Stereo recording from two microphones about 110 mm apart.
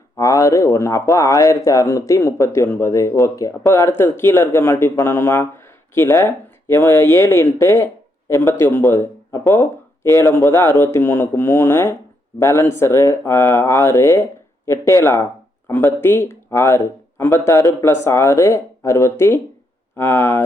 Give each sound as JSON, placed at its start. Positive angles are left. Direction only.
{"t": 0.2, "sound": "speech", "side_deg": 30}